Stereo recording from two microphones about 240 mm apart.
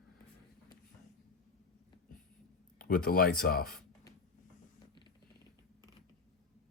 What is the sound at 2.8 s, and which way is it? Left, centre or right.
Speech, left.